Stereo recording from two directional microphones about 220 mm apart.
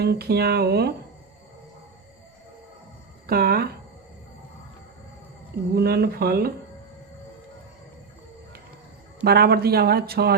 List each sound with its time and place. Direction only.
0.0 s speech: 45° right (ahead or behind)
3.2 s speech: 45° right (ahead or behind)
5.7 s speech: 45° right (ahead or behind)
9.2 s speech: 45° right (ahead or behind)